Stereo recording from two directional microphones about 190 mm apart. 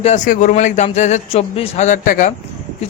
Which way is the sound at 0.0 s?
40° left (ahead or behind).